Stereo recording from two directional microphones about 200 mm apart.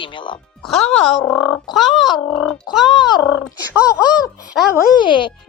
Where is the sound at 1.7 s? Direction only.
Centre (ahead or behind).